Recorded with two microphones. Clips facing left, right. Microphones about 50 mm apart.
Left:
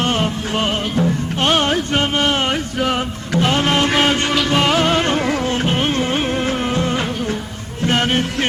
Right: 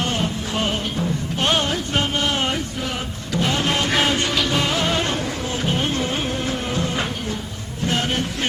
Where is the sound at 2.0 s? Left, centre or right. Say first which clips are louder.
Left 2 dB; left.